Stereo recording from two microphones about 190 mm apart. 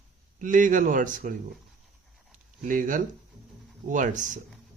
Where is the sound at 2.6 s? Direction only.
45° right (ahead or behind).